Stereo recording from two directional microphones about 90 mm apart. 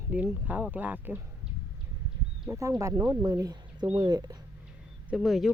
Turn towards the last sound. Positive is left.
turn(degrees=0)  # may be behind; listen again after turning